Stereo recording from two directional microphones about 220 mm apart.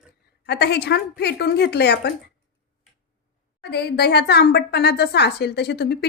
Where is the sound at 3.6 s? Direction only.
50° left (ahead or behind).